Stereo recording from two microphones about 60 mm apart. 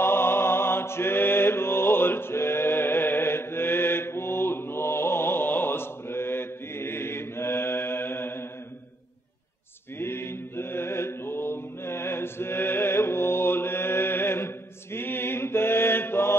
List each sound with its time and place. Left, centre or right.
0.0 s mantra: left
9.9 s mantra: left